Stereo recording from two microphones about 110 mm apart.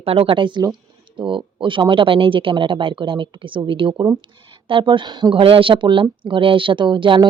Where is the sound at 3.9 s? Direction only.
40° right (ahead or behind).